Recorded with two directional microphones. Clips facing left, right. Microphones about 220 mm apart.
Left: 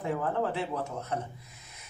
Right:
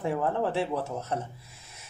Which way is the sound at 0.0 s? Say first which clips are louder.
Right 2 dB; 30° right (ahead or behind).